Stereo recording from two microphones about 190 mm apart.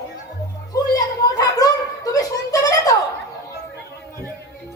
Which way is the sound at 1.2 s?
20° left (ahead or behind).